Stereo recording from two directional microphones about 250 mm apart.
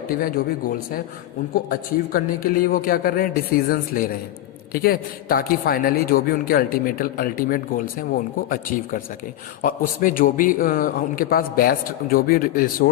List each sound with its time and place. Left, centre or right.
0.1 s a man's voice: left